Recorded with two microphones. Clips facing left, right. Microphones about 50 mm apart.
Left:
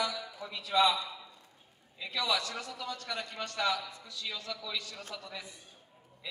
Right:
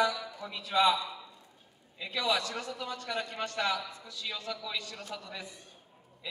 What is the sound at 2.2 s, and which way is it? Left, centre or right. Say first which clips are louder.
A man's voice: right 2 dB; right.